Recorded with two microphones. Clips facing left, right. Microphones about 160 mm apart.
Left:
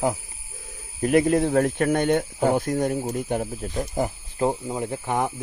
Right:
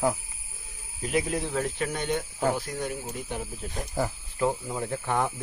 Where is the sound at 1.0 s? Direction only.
55° left (ahead or behind).